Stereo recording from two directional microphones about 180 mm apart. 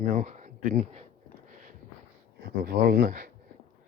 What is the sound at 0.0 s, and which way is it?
Speech, 45° right (ahead or behind).